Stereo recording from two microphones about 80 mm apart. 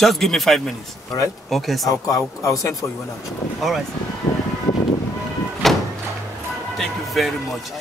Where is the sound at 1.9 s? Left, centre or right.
Left.